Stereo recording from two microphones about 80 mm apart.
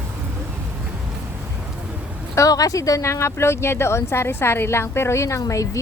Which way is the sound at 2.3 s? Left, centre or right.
Left.